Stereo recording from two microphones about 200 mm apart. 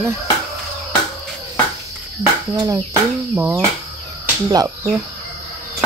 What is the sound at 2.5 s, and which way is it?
Speech, 15° right (ahead or behind).